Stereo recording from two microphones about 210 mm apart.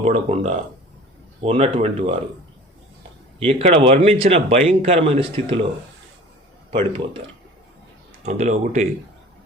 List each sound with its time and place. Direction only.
0.0 s speech: 30° right (ahead or behind)
3.4 s speech: 30° right (ahead or behind)
6.7 s speech: 25° right (ahead or behind)
8.2 s speech: 35° right (ahead or behind)